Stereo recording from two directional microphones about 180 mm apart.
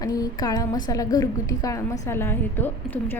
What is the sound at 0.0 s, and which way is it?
A woman's voice, 20° left (ahead or behind).